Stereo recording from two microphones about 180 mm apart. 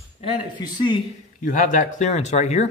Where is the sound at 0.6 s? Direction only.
25° left (ahead or behind).